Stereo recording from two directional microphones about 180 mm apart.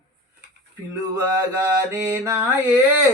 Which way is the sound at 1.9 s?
15° right (ahead or behind).